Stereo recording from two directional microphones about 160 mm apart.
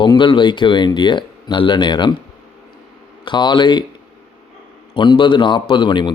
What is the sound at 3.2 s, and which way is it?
Speech, 30° left (ahead or behind).